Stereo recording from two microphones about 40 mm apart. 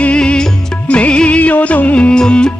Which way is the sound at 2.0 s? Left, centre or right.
Left.